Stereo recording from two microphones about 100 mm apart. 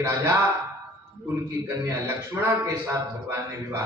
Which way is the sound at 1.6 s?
25° right (ahead or behind).